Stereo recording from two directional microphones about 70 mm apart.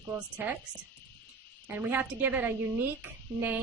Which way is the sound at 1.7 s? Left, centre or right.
Right.